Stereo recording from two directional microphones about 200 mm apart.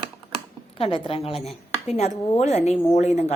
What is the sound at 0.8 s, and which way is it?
Speech, 25° left (ahead or behind).